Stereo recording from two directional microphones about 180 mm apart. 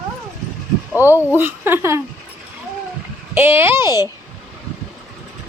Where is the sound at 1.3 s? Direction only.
10° right (ahead or behind).